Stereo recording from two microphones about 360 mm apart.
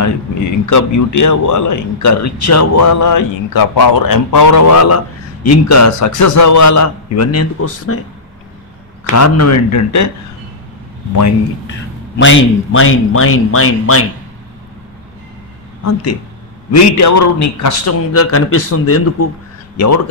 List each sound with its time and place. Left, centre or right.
0.7 s a man's voice: left
9.1 s a man's voice: left
12.2 s speech: left
15.8 s a man's voice: left